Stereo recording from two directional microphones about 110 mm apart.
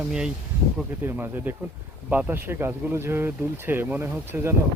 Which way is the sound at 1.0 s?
20° right (ahead or behind).